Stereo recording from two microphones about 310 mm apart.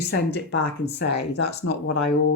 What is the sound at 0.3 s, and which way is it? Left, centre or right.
Speech, left.